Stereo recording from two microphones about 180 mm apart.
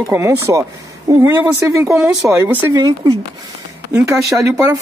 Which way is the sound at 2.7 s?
25° right (ahead or behind).